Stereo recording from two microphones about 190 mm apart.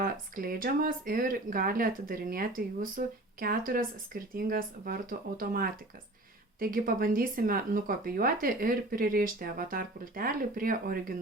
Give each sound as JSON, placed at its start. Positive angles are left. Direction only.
{"t": 0.0, "sound": "speech", "side_deg": -50}